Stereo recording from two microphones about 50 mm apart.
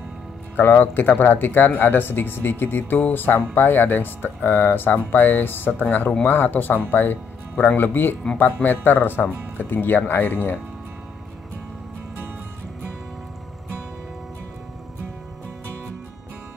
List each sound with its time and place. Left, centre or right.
0.6 s speech: left